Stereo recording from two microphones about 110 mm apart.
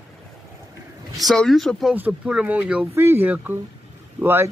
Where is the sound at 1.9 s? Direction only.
10° right (ahead or behind).